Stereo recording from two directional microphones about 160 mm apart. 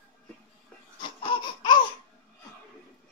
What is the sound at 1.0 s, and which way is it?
Laughter, 30° left (ahead or behind).